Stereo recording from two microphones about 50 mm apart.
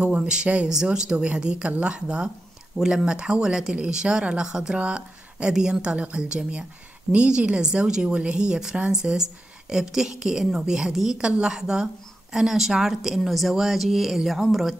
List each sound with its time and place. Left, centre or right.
0.0 s a woman's voice: centre
11.1 s a woman's voice: centre